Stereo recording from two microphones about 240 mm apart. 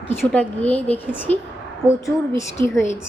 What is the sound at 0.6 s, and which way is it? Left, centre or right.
Speech, left.